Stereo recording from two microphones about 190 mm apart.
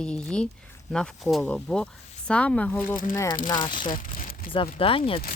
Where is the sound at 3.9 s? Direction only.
45° left (ahead or behind).